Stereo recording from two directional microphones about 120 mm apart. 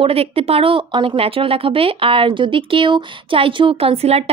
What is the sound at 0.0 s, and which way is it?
A woman's voice, 55° right (ahead or behind).